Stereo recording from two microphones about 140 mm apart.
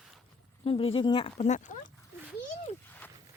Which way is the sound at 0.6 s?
40° left (ahead or behind).